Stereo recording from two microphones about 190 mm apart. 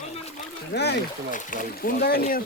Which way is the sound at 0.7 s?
60° left (ahead or behind).